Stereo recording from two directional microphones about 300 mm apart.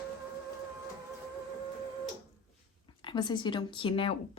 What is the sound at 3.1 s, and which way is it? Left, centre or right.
A woman's voice, centre.